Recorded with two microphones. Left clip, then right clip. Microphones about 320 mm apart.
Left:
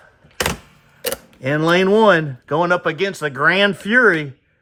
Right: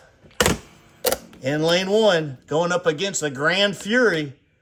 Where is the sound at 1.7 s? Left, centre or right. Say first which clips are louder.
Left 6 dB; left.